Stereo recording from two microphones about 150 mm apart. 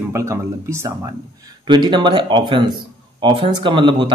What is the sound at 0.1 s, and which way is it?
Speech, 20° right (ahead or behind).